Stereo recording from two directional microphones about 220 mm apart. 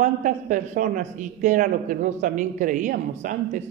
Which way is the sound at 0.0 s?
35° right (ahead or behind).